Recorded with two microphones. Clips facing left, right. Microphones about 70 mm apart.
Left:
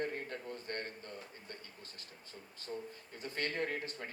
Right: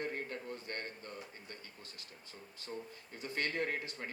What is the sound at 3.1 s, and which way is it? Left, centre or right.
Speech, left.